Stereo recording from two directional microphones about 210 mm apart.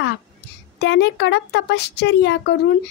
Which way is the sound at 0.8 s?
55° left (ahead or behind).